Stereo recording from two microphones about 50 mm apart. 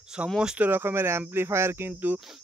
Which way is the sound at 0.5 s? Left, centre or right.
Right.